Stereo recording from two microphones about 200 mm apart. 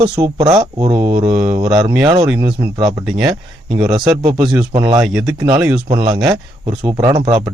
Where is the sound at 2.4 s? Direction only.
20° right (ahead or behind).